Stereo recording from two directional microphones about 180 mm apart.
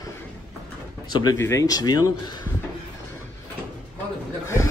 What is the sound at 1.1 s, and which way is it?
Speech, 20° left (ahead or behind).